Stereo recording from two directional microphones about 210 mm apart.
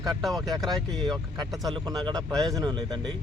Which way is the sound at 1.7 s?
20° right (ahead or behind).